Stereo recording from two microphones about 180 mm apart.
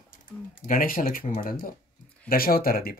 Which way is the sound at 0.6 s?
50° left (ahead or behind).